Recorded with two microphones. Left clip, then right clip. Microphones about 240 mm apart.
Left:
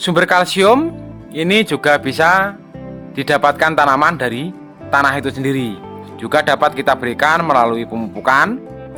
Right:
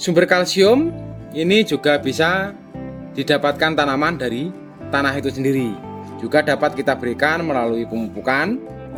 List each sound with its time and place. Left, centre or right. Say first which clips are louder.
0.0 s speech: left 3 dB; centre